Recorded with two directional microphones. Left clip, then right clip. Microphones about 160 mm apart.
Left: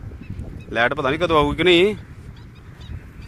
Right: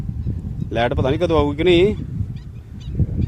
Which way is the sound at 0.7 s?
35° right (ahead or behind).